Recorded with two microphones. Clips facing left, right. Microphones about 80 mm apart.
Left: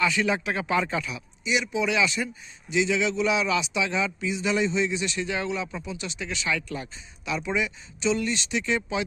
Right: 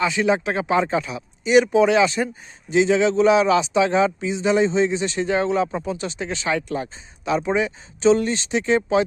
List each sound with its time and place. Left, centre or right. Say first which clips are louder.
0.0 s speech: right 5 dB; right
1.5 s speech: right 11 dB; right